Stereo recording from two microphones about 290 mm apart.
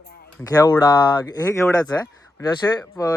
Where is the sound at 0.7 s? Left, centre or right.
Centre.